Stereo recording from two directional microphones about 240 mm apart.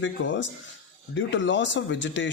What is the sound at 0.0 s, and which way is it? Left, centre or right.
Speech, left.